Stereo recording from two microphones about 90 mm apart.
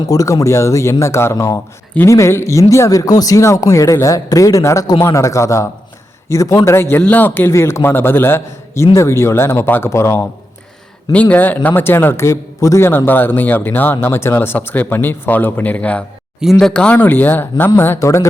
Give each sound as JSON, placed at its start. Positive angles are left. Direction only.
{"t": 0.1, "sound": "a man's voice", "side_deg": 40}
{"t": 11.1, "sound": "a man's voice", "side_deg": 15}